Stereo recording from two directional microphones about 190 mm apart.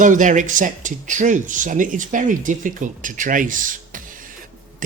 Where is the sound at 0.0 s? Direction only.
45° right (ahead or behind).